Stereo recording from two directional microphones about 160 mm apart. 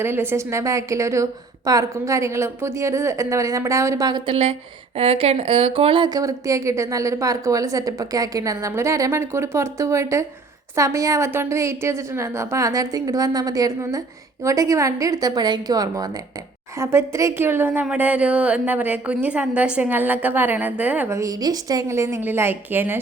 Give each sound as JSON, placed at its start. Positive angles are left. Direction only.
{"t": 0.0, "sound": "speech", "side_deg": -15}
{"t": 4.9, "sound": "a woman's voice", "side_deg": -35}